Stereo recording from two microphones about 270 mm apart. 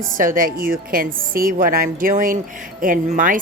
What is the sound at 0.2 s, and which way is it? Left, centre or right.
A woman's voice, right.